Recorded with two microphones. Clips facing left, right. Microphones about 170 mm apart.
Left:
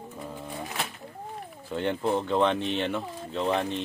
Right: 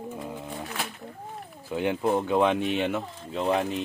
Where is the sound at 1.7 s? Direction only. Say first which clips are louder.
Right 2 dB; 10° right (ahead or behind).